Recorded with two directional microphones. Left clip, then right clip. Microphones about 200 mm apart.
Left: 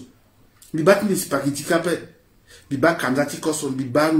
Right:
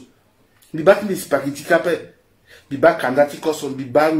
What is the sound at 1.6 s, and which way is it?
Speech, 15° left (ahead or behind).